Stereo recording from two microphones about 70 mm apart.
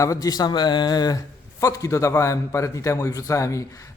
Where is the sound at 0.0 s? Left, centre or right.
Left.